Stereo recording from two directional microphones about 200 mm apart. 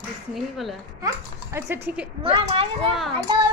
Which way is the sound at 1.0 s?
15° right (ahead or behind).